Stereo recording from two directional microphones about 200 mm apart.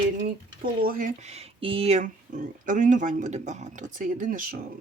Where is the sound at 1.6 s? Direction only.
30° right (ahead or behind).